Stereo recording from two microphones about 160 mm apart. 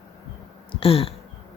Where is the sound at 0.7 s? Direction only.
35° left (ahead or behind).